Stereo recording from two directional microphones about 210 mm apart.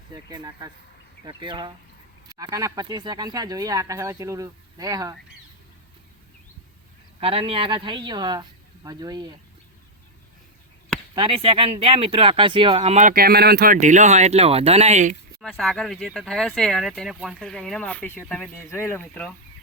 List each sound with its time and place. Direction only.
0.1 s speech: 20° right (ahead or behind)
7.2 s speech: 25° right (ahead or behind)
11.1 s speech: 25° right (ahead or behind)
15.4 s speech: centre (ahead or behind)